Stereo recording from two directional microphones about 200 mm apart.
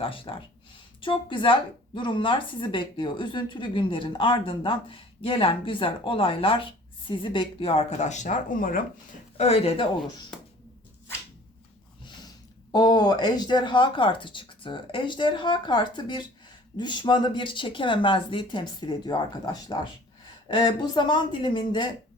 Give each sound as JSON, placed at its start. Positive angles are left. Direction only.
{"t": 0.0, "sound": "speech", "side_deg": 25}
{"t": 9.4, "sound": "speech", "side_deg": 30}
{"t": 12.7, "sound": "speech", "side_deg": 20}